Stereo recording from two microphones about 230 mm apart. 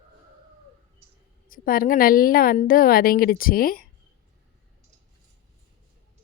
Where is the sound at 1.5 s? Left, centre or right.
Left.